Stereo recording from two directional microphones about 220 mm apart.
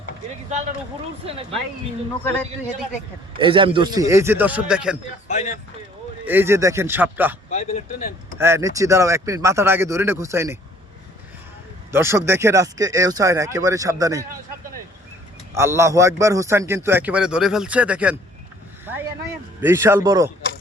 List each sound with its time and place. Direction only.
1.2 s speech: 25° right (ahead or behind)
3.3 s a man's voice: 25° right (ahead or behind); by 4.9 s 5° right (ahead or behind)
5.3 s speech: 30° left (ahead or behind)
6.2 s a man's voice: 10° right (ahead or behind)
7.5 s speech: 35° left (ahead or behind)
8.4 s a man's voice: 10° right (ahead or behind)
11.9 s a man's voice: 10° right (ahead or behind)
15.5 s a man's voice: 10° right (ahead or behind)
19.6 s a man's voice: 10° right (ahead or behind)